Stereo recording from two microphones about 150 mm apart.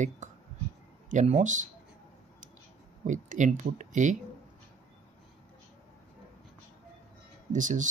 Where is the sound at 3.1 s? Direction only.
55° right (ahead or behind).